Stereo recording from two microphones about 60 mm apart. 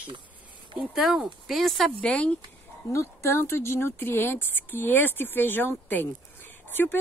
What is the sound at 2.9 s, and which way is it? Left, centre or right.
Speech, left.